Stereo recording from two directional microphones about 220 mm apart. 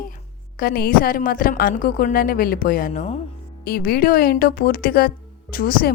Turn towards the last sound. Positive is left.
turn(degrees=40)  # may be behind; listen again after turning